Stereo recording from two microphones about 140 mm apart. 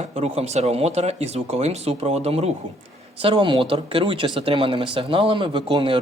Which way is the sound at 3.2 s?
40° right (ahead or behind).